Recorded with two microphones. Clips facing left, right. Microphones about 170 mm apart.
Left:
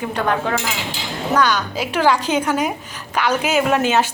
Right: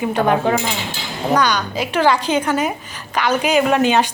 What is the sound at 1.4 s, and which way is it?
A woman's voice, 5° left (ahead or behind).